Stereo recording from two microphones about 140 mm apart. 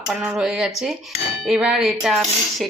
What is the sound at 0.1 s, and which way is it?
Dishes, 5° right (ahead or behind).